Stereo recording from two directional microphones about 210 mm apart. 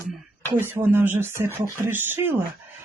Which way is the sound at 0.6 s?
10° right (ahead or behind).